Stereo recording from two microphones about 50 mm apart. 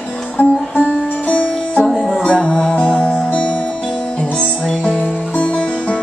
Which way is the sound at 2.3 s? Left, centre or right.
Left.